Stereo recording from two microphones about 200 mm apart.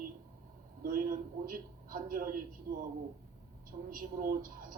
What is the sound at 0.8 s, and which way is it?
A man's voice, 45° right (ahead or behind).